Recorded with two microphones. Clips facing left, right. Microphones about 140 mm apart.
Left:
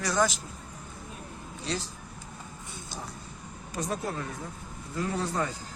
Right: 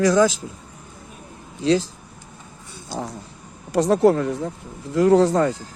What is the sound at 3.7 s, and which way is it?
Speech, 85° right.